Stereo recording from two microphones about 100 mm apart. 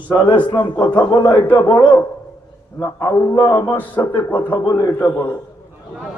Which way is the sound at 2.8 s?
30° left (ahead or behind).